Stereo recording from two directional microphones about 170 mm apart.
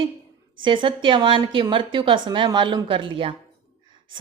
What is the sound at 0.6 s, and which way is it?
Speech, 30° right (ahead or behind).